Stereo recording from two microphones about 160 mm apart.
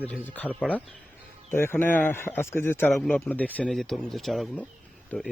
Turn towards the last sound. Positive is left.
turn(degrees=10)  # may be behind; listen again after turning